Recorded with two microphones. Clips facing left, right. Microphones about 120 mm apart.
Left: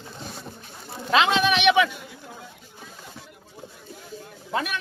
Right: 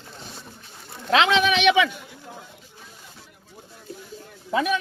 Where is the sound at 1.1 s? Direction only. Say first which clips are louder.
Right 1 dB; 90° right.